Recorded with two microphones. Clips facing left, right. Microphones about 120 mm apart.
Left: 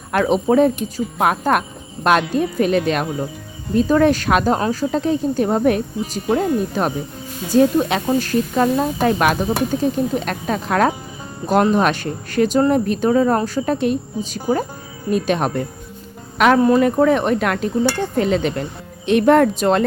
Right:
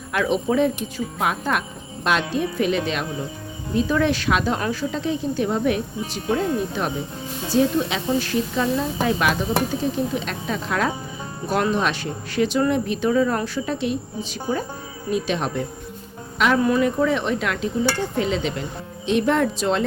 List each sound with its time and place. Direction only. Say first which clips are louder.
0.1 s speech: left 5 dB; 40° left (ahead or behind)
14.5 s speech: left 6 dB; 35° left (ahead or behind)
15.1 s speech: left 5 dB; 50° left (ahead or behind)